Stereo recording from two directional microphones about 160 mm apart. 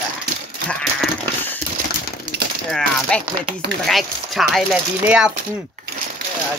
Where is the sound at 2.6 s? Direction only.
5° left (ahead or behind).